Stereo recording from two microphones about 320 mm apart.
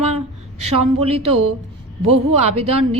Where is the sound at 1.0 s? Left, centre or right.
Centre.